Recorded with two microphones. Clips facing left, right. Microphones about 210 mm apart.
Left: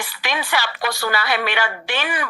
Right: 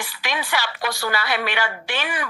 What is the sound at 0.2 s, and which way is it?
A woman's voice, 70° left (ahead or behind).